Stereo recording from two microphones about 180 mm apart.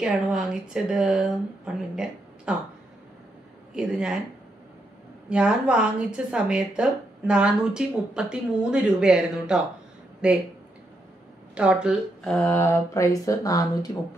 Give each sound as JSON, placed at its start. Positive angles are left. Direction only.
{"t": 0.0, "sound": "a woman's voice", "side_deg": -5}
{"t": 2.5, "sound": "a woman's voice", "side_deg": -5}
{"t": 3.7, "sound": "a woman's voice", "side_deg": -5}
{"t": 5.3, "sound": "a woman's voice", "side_deg": -5}
{"t": 11.5, "sound": "speech", "side_deg": -5}
{"t": 12.4, "sound": "mantra", "side_deg": 10}